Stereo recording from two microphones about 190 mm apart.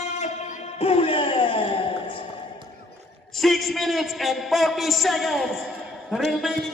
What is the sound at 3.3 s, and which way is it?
A man's voice, centre (ahead or behind).